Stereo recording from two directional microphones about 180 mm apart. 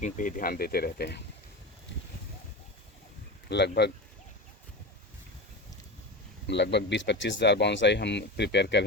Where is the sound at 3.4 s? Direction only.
70° left (ahead or behind).